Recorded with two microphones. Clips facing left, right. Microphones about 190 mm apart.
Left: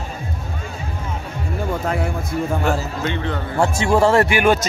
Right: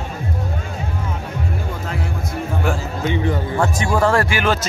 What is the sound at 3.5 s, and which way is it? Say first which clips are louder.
Speech: left 6 dB; 25° left (ahead or behind).